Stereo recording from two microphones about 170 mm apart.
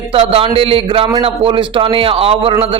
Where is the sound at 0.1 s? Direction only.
35° right (ahead or behind).